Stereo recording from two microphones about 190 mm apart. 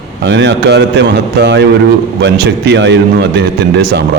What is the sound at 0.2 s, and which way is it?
A man's voice, 70° right (ahead or behind).